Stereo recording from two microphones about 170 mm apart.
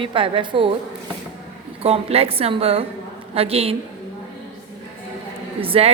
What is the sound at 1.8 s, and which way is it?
A woman's voice, 35° right (ahead or behind).